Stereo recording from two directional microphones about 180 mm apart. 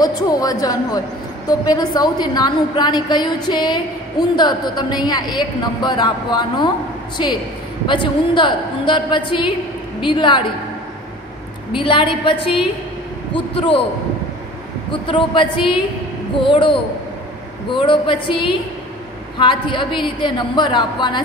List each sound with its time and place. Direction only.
0.0 s a woman's voice: 20° left (ahead or behind)
11.7 s a woman's voice: 25° left (ahead or behind)
14.9 s a woman's voice: 30° left (ahead or behind)